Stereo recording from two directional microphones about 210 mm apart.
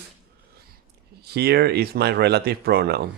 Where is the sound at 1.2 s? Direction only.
50° right (ahead or behind).